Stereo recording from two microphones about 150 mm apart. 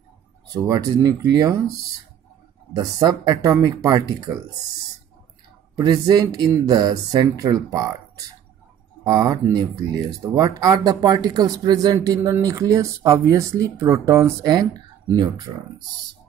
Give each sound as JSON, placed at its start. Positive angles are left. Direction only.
{"t": 0.5, "sound": "speech", "side_deg": -25}
{"t": 2.7, "sound": "speech", "side_deg": -25}
{"t": 5.8, "sound": "speech", "side_deg": -25}
{"t": 9.0, "sound": "speech", "side_deg": -25}